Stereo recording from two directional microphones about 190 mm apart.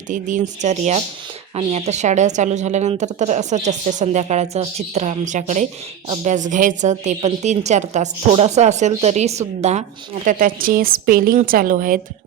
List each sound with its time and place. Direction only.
0.1 s a woman's voice: 40° right (ahead or behind)